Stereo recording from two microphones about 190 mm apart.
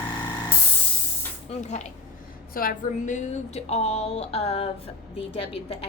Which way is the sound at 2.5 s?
50° left (ahead or behind).